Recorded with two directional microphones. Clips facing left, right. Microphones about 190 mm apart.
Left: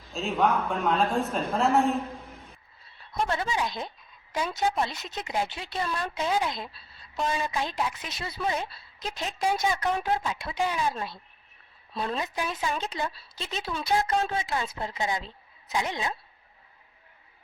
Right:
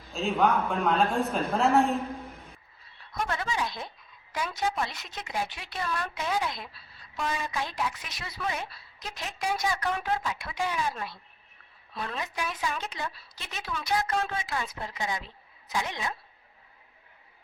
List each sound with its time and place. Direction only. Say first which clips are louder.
0.1 s a woman's voice: even; centre (ahead or behind)
3.1 s a woman's voice: left 3 dB; 25° left (ahead or behind)